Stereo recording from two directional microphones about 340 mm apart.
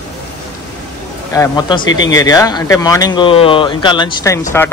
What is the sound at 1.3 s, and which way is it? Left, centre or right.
Speech, centre.